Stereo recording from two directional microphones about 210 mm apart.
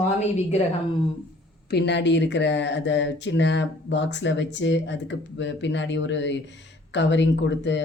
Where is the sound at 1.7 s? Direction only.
55° left (ahead or behind).